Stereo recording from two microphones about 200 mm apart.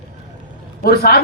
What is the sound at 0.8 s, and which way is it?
Speech, 50° left (ahead or behind).